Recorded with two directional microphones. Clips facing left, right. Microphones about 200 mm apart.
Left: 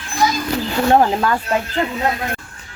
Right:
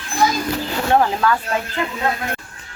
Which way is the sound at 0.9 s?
25° left (ahead or behind).